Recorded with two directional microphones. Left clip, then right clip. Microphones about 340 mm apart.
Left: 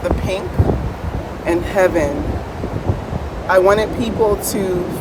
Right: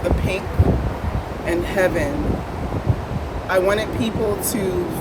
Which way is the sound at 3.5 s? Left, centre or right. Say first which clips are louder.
Left 6 dB; centre.